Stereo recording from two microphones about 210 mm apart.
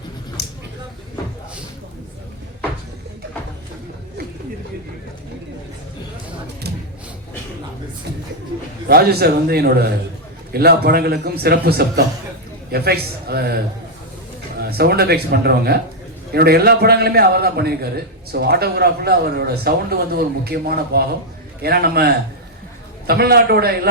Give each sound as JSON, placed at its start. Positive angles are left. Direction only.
{"t": 0.4, "sound": "a sound", "side_deg": 50}
{"t": 8.9, "sound": "a man's voice", "side_deg": -50}
{"t": 14.6, "sound": "a man's voice", "side_deg": -50}